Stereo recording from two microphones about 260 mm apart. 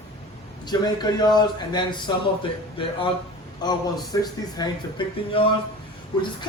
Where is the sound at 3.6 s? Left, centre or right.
Centre.